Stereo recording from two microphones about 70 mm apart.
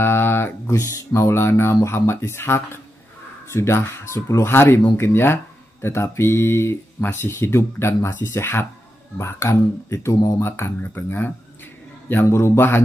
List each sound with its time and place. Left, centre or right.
0.0 s music: left
1.8 s speech: left